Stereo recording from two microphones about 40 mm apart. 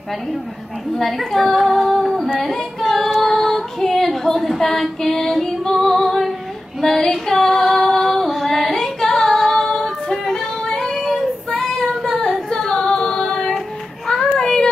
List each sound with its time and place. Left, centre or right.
0.9 s a child's voice: centre
2.4 s female singing: centre
14.0 s child singing: centre